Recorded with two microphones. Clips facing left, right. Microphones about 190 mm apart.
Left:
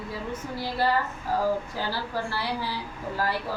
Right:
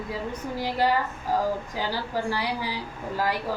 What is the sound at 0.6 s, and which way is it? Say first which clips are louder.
Female singing: right 2 dB; 15° right (ahead or behind).